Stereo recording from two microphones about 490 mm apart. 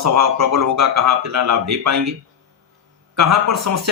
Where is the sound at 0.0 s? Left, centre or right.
Right.